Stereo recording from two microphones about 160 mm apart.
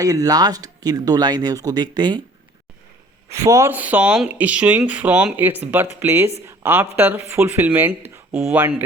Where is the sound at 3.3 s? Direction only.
20° right (ahead or behind).